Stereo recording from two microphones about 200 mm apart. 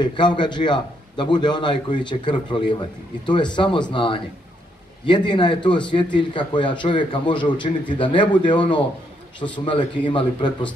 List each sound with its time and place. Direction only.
0.0 s a man's voice: 20° left (ahead or behind)